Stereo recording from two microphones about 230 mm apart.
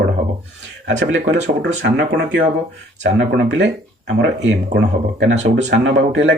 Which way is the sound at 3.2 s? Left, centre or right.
Right.